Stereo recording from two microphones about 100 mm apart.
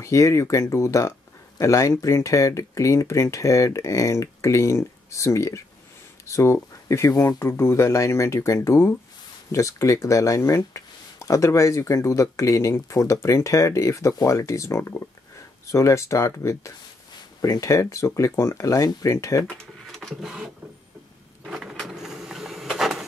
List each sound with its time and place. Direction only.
0.0 s speech: 30° left (ahead or behind)
19.4 s speech: 5° left (ahead or behind)
21.5 s a sound: 5° right (ahead or behind)